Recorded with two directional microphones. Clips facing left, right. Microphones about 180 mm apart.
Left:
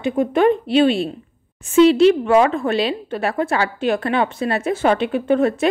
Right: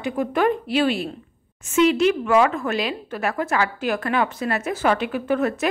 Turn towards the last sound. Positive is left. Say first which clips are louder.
# left 5 dB
turn(degrees=25)  # may be behind; listen again after turning